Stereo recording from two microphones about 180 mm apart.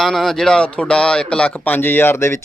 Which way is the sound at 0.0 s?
Centre (ahead or behind).